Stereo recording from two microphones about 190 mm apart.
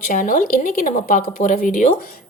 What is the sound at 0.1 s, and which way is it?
Speech, 45° left (ahead or behind).